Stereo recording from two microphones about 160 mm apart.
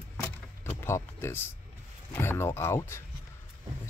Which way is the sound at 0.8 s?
15° left (ahead or behind).